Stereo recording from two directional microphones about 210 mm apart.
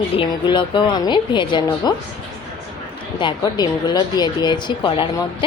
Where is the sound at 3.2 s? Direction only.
20° left (ahead or behind).